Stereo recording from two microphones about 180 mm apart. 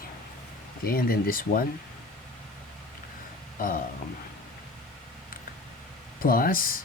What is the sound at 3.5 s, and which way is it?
Speech, 50° left (ahead or behind).